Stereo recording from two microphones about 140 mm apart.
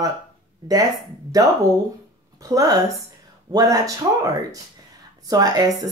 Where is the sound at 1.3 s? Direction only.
25° right (ahead or behind).